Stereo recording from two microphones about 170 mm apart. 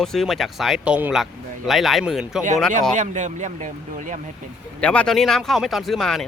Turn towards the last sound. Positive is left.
turn(degrees=0)  # may be behind; listen again after turning